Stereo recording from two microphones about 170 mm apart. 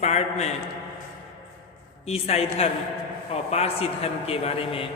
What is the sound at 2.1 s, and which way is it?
A man's voice, 40° left (ahead or behind).